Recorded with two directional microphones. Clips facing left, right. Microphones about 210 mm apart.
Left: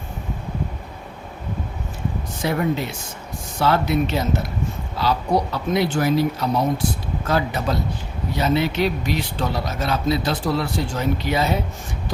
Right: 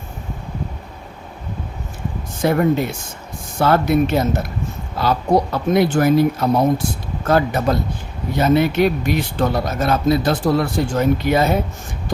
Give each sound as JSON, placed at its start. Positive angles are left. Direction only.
{"t": 2.4, "sound": "speech", "side_deg": -50}